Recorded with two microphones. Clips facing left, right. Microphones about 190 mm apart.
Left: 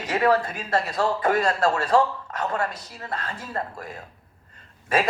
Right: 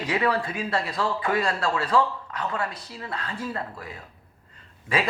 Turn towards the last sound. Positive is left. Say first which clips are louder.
# left 3 dB
turn(degrees=45)  # may be behind; listen again after turning